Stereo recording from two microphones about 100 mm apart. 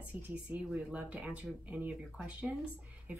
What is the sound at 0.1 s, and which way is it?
Speech, 15° right (ahead or behind).